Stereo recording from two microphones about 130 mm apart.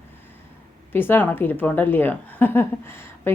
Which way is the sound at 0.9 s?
15° left (ahead or behind).